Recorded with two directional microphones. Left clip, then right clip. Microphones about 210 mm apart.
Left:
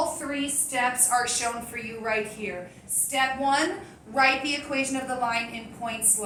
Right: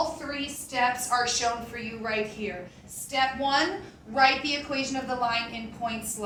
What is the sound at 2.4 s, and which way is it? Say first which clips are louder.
A woman's voice: left 1 dB; 15° right (ahead or behind).